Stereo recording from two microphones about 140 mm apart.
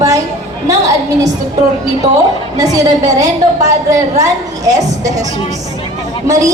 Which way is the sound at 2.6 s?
25° right (ahead or behind).